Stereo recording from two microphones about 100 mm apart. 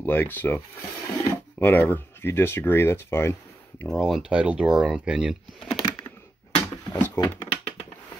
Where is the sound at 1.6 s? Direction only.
20° left (ahead or behind).